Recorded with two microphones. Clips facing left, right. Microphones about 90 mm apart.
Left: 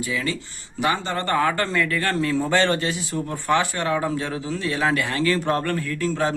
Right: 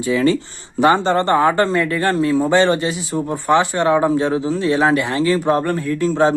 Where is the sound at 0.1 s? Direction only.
35° right (ahead or behind).